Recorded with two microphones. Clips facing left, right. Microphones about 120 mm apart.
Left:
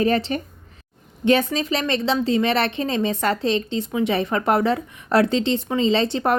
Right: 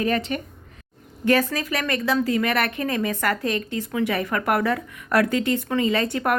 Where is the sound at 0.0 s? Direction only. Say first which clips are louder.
Left 3 dB; 30° left (ahead or behind).